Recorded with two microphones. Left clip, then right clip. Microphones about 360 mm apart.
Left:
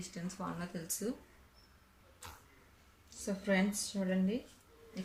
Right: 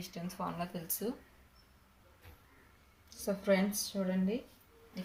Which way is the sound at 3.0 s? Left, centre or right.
Centre.